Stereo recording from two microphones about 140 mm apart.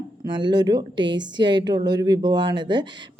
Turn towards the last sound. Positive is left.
turn(degrees=-35)  # may be behind; listen again after turning